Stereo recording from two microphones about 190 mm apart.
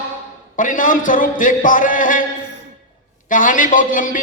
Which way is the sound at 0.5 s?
45° left (ahead or behind).